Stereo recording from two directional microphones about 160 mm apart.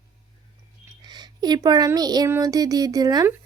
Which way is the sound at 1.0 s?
25° right (ahead or behind).